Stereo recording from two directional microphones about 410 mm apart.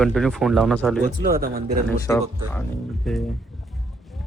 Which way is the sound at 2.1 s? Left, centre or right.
Centre.